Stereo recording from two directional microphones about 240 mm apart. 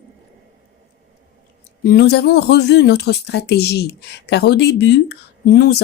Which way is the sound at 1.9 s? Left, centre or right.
Left.